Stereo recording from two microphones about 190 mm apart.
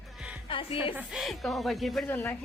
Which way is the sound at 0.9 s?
5° right (ahead or behind).